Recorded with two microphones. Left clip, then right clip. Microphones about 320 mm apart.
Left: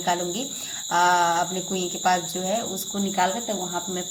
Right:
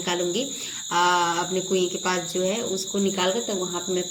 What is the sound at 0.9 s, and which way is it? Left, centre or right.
Cricket, centre.